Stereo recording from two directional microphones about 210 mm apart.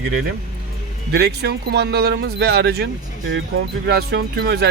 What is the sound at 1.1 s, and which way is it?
Speech, 50° right (ahead or behind).